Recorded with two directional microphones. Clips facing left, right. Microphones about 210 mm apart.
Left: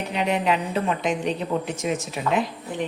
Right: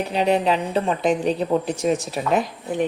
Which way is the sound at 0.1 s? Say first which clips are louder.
Right 3 dB; 35° right (ahead or behind).